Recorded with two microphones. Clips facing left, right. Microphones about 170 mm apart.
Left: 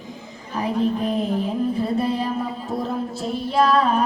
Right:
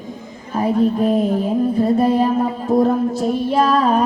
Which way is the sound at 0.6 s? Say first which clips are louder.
Right 6 dB; 45° right (ahead or behind).